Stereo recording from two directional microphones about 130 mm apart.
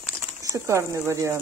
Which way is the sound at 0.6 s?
20° right (ahead or behind).